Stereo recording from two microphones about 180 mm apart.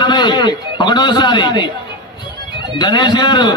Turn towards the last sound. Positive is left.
turn(degrees=25)  # may be behind; listen again after turning